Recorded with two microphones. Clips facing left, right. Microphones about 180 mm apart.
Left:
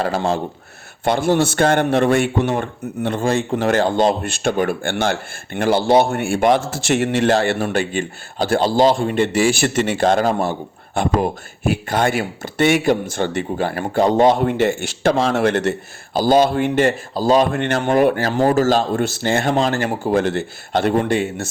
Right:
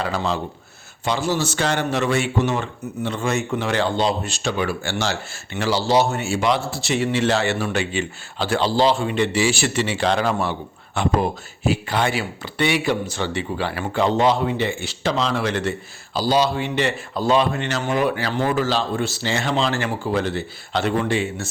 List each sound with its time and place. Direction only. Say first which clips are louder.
0.0 s speech: left 4 dB; 50° left (ahead or behind)
3.2 s speech: left 4 dB; 35° left (ahead or behind); by 16.9 s 50° left (ahead or behind)
17.2 s a man's voice: left 3 dB; 40° left (ahead or behind)
17.5 s speech: left 6 dB; 55° left (ahead or behind)